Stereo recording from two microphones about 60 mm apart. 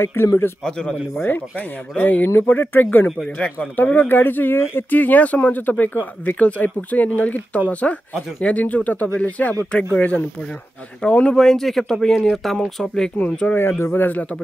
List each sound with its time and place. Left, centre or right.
0.0 s a man's voice: left
0.7 s speech: centre
2.0 s speech: left
11.0 s speech: centre
13.2 s speech: left
13.6 s speech: left